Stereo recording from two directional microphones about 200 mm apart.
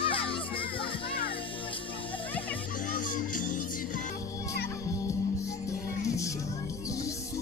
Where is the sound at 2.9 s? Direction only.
40° left (ahead or behind).